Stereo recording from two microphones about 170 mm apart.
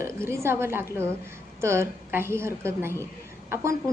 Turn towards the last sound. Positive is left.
turn(degrees=-15)  # may be behind; listen again after turning